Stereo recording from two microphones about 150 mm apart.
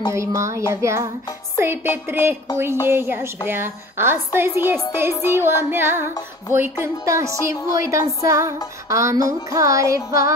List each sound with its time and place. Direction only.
0.1 s music: 20° right (ahead or behind)